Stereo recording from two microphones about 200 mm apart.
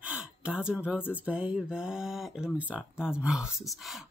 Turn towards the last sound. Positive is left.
turn(degrees=0)  # may be behind; listen again after turning